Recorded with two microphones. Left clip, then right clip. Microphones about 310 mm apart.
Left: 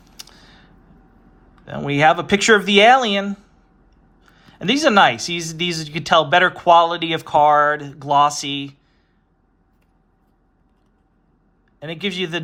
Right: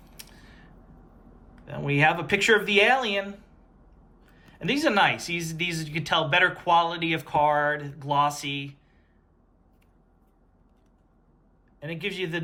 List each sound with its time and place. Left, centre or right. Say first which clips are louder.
0.0 s a sound: left 7 dB; centre
1.6 s speech: left 8 dB; centre
11.8 s speech: left 7 dB; centre